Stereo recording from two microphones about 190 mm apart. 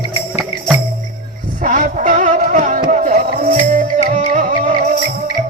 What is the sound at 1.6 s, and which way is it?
Music, 40° right (ahead or behind).